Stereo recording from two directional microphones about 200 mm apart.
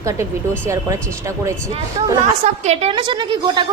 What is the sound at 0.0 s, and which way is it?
Speech, 15° right (ahead or behind).